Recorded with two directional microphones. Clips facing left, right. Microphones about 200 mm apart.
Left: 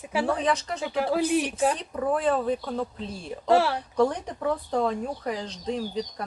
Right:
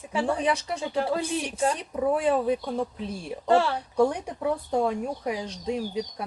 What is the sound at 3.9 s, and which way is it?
Speech, 10° right (ahead or behind).